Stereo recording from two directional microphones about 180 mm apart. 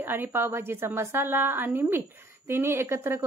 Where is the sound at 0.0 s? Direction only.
10° right (ahead or behind).